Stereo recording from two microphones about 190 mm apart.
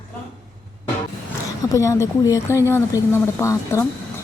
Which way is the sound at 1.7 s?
15° left (ahead or behind).